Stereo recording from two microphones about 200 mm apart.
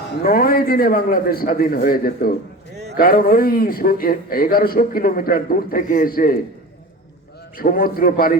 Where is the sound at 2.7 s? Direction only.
55° right (ahead or behind).